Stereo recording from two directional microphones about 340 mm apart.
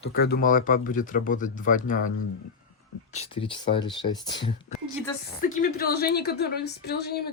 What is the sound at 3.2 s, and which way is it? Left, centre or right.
Speech, centre.